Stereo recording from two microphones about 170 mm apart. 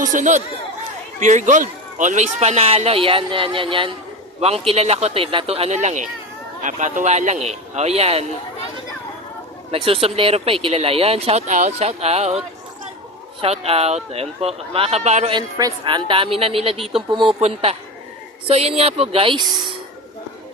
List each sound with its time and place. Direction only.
0.0 s speech: 50° right (ahead or behind)
9.7 s speech: 35° right (ahead or behind)
13.4 s speech: 35° right (ahead or behind)
15.3 s speech: 25° right (ahead or behind)